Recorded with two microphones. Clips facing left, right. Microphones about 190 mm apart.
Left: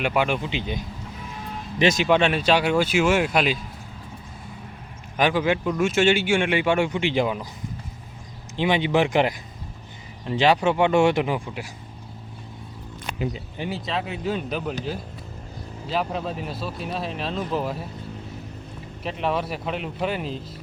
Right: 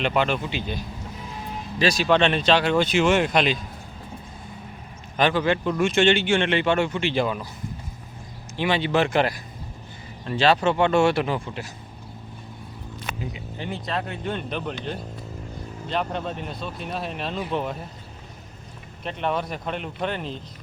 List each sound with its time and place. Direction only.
0.0 s speech: 10° left (ahead or behind)
5.1 s speech: 10° left (ahead or behind)
8.5 s speech: 15° left (ahead or behind)
13.6 s speech: 5° left (ahead or behind)
15.9 s speech: 5° left (ahead or behind)
19.0 s speech: centre (ahead or behind)